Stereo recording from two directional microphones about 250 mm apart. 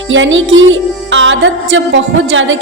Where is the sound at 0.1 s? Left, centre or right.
Right.